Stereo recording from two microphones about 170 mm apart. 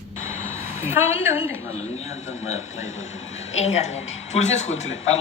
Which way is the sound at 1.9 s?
40° left (ahead or behind).